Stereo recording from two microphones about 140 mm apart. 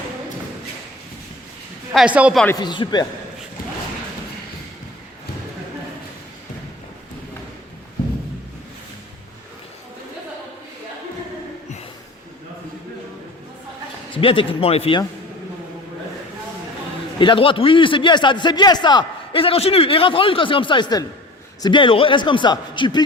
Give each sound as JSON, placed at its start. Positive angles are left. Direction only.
{"t": 1.9, "sound": "a woman's voice", "side_deg": -5}
{"t": 2.6, "sound": "a man's voice", "side_deg": 30}
{"t": 14.2, "sound": "a man's voice", "side_deg": 40}
{"t": 17.2, "sound": "a man's voice", "side_deg": 35}